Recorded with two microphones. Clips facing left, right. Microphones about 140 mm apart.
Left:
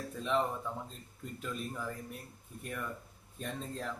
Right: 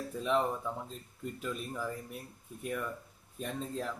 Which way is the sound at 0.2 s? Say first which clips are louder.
Right 2 dB; 5° right (ahead or behind).